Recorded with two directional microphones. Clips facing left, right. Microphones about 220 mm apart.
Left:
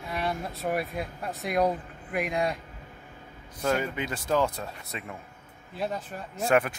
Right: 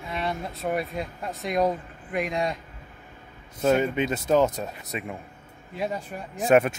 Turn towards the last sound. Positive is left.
turn(degrees=-20)  # may be behind; listen again after turning